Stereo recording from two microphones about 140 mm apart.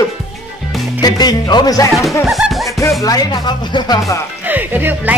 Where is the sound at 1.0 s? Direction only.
30° left (ahead or behind).